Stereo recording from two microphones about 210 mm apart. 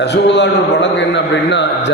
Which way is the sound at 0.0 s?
55° left (ahead or behind).